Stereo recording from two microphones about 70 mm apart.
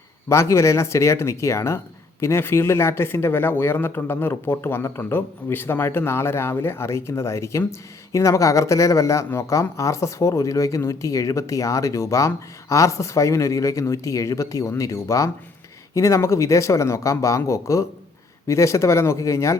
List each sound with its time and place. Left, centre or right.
0.3 s speech: left